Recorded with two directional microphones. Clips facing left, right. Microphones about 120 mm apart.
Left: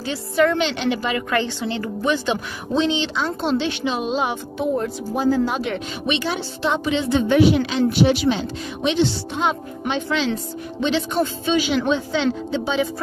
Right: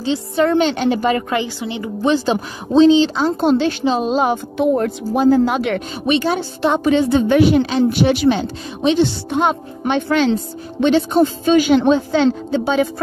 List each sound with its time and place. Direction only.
0.0 s speech: 30° right (ahead or behind)
1.3 s a woman's voice: 15° right (ahead or behind)
2.0 s speech: 35° right (ahead or behind)
4.6 s speech: 65° right (ahead or behind)
6.0 s a woman's voice: 45° right (ahead or behind)